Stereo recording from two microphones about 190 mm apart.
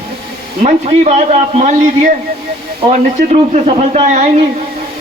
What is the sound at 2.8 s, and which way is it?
A man's voice, 35° right (ahead or behind).